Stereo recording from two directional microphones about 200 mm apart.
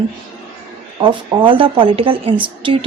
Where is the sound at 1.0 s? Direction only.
25° right (ahead or behind).